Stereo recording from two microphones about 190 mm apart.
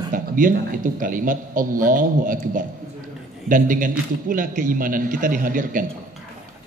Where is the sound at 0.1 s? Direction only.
45° right (ahead or behind).